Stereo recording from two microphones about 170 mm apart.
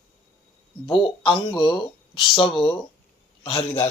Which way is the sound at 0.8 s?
30° left (ahead or behind).